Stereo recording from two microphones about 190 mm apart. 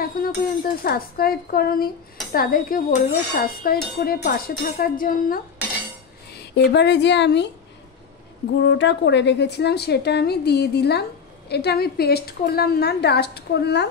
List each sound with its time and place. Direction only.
0.0 s a sound: 50° left (ahead or behind)
6.3 s speech: 60° left (ahead or behind)
8.6 s a woman's voice: 70° left (ahead or behind)